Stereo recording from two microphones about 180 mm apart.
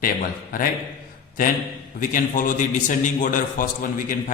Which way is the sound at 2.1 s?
50° left (ahead or behind).